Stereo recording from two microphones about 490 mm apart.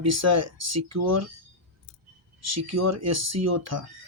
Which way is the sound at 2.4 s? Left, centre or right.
Right.